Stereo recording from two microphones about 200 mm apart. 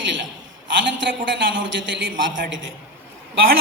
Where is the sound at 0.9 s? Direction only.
65° right (ahead or behind).